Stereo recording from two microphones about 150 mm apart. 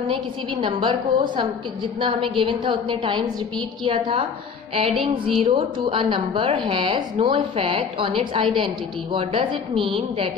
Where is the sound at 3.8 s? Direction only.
35° right (ahead or behind).